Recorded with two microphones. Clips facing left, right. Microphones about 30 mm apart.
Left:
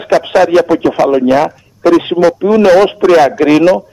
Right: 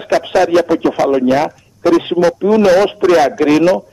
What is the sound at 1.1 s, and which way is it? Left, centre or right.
A man's voice, centre.